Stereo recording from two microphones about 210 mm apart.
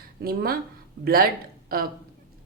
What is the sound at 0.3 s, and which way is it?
Speech, 45° right (ahead or behind).